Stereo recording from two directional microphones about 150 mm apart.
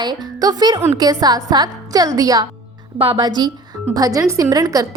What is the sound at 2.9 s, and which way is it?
A woman's voice, 40° right (ahead or behind).